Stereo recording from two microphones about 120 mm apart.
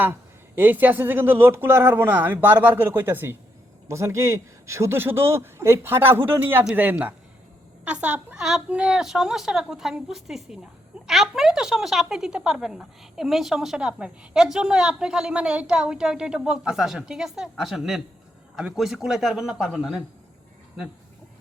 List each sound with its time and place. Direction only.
0.0 s a man's voice: 15° right (ahead or behind)